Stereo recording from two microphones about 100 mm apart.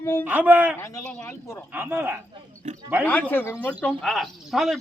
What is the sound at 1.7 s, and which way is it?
Speech, 20° right (ahead or behind).